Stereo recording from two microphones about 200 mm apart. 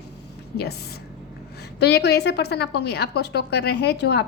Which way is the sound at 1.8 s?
55° left (ahead or behind).